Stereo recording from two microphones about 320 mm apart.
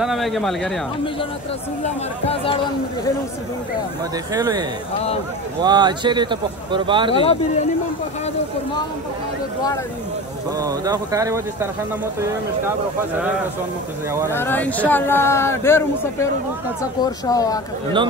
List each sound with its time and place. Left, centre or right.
0.0 s speech: centre
2.2 s speech: centre
4.3 s speech: centre
7.2 s speech: centre
10.6 s speech: centre
14.3 s speech: centre